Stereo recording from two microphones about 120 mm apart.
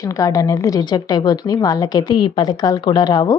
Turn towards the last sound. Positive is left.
turn(degrees=35)  # may be behind; listen again after turning